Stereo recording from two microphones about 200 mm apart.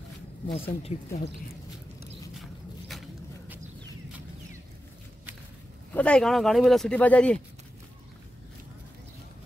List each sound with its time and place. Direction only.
0.6 s speech: 30° left (ahead or behind)
2.9 s a sound: centre (ahead or behind)
5.9 s speech: 5° left (ahead or behind)